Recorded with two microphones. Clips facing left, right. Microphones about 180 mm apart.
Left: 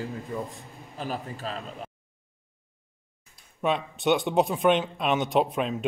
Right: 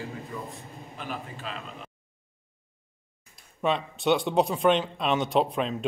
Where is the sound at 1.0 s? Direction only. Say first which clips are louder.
Left 4 dB; 40° left (ahead or behind).